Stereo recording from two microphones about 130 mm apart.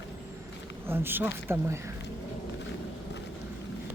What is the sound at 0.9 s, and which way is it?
Speech, 15° right (ahead or behind).